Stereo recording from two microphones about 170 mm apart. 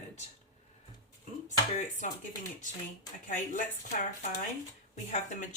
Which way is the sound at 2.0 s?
50° left (ahead or behind).